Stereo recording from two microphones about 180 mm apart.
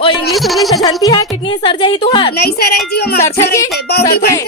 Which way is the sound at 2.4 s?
60° left (ahead or behind).